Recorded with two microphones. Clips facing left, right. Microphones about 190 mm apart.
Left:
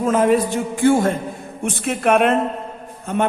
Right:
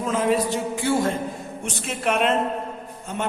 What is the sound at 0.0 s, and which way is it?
A man's voice, 50° left (ahead or behind).